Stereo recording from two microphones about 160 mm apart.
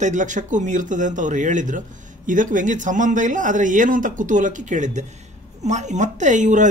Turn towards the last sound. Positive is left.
turn(degrees=-50)  # may be behind; listen again after turning